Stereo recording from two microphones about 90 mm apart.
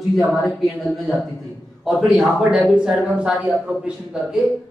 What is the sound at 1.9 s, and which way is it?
A man's voice, 5° right (ahead or behind).